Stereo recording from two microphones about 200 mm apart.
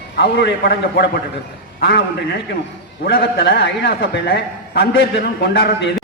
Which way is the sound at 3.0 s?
55° left (ahead or behind).